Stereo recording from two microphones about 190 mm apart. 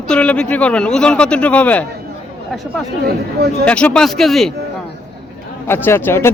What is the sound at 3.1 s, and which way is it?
Speech, 55° right (ahead or behind).